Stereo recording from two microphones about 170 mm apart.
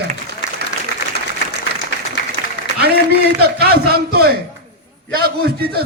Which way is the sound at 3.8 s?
65° right (ahead or behind).